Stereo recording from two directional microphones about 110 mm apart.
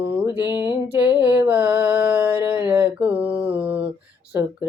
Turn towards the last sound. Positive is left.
turn(degrees=-25)  # may be behind; listen again after turning